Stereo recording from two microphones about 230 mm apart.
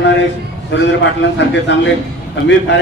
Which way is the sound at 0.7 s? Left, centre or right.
Left.